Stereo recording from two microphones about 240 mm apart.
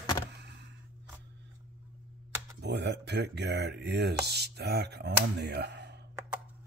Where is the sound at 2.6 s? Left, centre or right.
Right.